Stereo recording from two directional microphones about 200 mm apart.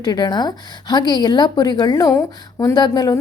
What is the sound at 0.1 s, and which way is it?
A woman's voice, 20° left (ahead or behind).